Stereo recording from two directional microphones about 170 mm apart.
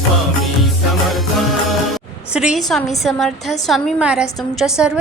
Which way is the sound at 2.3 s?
5° right (ahead or behind).